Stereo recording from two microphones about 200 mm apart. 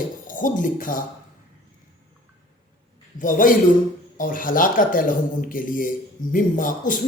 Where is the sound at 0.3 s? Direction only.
40° left (ahead or behind).